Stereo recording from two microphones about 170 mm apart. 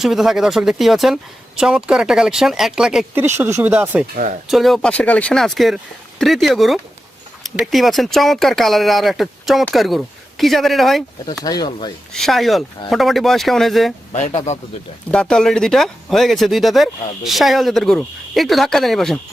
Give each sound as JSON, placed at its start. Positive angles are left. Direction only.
{"t": 0.0, "sound": "speech", "side_deg": 0}
{"t": 3.2, "sound": "speech", "side_deg": -15}
{"t": 4.1, "sound": "speech", "side_deg": -50}
{"t": 4.4, "sound": "speech", "side_deg": 0}
{"t": 11.4, "sound": "speech", "side_deg": 20}
{"t": 12.1, "sound": "speech", "side_deg": 0}
{"t": 15.1, "sound": "speech", "side_deg": 5}